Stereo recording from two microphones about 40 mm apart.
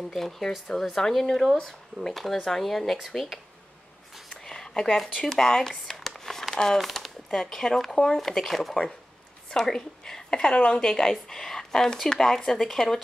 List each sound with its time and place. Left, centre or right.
0.1 s speech: centre
4.5 s a sound: centre
6.5 s speech: centre
6.8 s speech: centre
9.5 s a woman's voice: centre
10.8 s speech: centre